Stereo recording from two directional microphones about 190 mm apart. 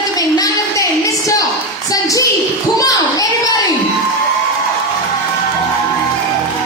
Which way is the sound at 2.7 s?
20° left (ahead or behind).